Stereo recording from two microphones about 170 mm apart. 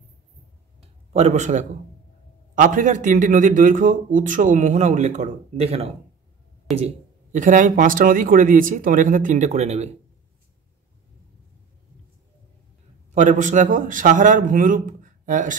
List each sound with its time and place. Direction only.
0.7 s a sound: 40° right (ahead or behind)
2.5 s a man's voice: 50° right (ahead or behind)
7.3 s a man's voice: 50° right (ahead or behind)
13.1 s a man's voice: 45° right (ahead or behind)